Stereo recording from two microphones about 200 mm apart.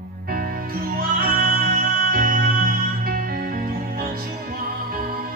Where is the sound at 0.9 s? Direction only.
45° right (ahead or behind).